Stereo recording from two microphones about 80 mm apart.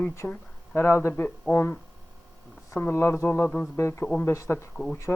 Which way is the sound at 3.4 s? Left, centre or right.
Centre.